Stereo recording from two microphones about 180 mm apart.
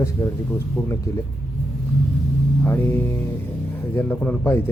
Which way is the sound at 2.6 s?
15° left (ahead or behind).